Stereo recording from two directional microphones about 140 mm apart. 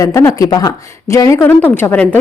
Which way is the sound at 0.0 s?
20° left (ahead or behind).